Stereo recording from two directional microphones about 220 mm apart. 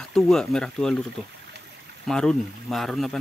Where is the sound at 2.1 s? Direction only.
5° left (ahead or behind).